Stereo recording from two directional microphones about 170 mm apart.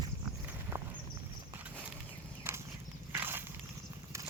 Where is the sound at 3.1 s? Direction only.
10° right (ahead or behind).